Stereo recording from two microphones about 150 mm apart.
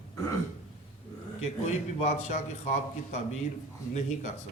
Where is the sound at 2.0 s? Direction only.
45° left (ahead or behind).